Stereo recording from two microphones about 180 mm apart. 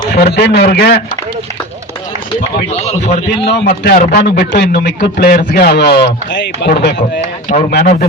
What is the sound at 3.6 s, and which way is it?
A man's voice, 60° left (ahead or behind).